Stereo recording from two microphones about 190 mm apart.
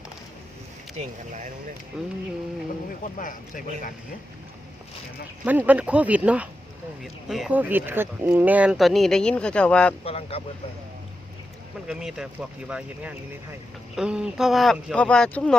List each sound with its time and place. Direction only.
0.9 s speech: 40° right (ahead or behind)
1.9 s speech: 5° right (ahead or behind)
3.0 s speech: 45° left (ahead or behind)
5.5 s speech: 10° right (ahead or behind)
10.0 s speech: 30° left (ahead or behind)
11.9 s speech: 5° right (ahead or behind)